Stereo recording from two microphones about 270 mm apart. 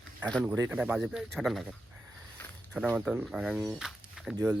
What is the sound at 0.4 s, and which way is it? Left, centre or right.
Speech, centre.